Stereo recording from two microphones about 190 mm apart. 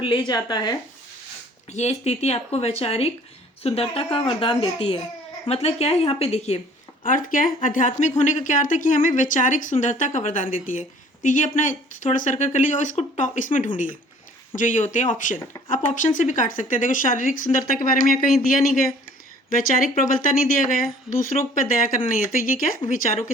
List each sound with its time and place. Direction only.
0.0 s a woman's voice: 25° left (ahead or behind)
1.7 s a woman's voice: 35° left (ahead or behind)
7.0 s speech: 45° left (ahead or behind)
19.5 s speech: 45° left (ahead or behind)